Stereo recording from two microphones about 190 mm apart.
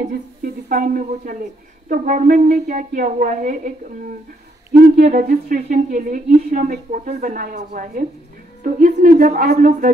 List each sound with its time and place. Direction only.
0.4 s speech: 50° right (ahead or behind)
4.8 s speech: 50° right (ahead or behind)